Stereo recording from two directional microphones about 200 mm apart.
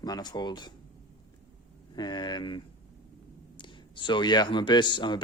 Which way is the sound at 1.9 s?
20° left (ahead or behind).